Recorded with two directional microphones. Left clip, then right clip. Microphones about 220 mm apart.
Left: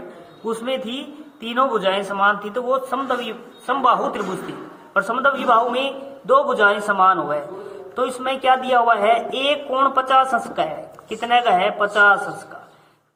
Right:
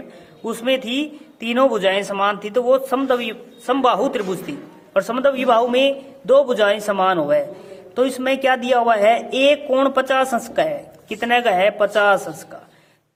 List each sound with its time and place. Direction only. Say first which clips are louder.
0.4 s a man's voice: right 3 dB; 45° right (ahead or behind)